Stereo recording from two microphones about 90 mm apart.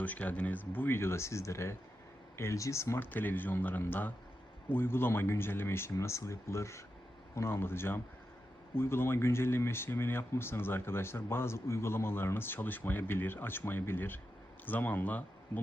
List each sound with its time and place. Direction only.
0.0 s speech: 15° left (ahead or behind)